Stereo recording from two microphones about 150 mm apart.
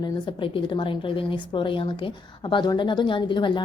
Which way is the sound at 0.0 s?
35° left (ahead or behind).